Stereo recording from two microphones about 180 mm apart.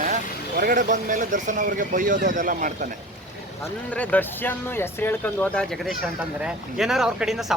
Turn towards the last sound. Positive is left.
turn(degrees=-5)  # may be behind; listen again after turning